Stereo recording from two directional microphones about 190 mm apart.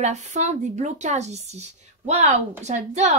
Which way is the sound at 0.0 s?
35° right (ahead or behind).